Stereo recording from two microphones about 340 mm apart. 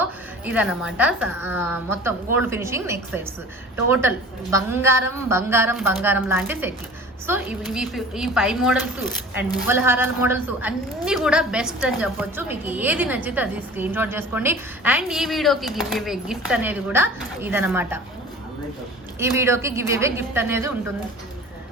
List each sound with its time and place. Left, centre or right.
0.0 s a woman's voice: centre
19.2 s a woman's voice: centre